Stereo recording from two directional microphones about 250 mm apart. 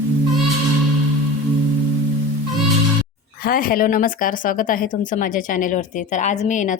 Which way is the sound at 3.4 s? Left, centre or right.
Left.